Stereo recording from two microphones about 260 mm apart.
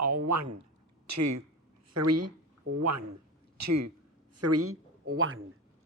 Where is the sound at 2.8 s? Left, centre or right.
Right.